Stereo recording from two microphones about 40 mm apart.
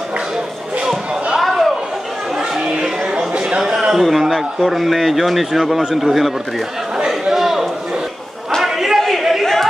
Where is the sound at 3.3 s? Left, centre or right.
Right.